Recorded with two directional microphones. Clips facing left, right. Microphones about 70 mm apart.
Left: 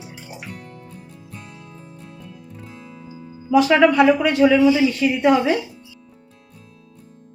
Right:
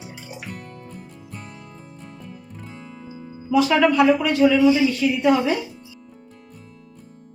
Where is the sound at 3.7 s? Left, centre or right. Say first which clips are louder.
Left 2 dB; left.